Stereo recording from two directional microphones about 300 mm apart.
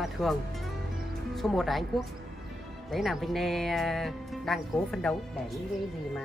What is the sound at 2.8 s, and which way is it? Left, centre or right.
Speech, centre.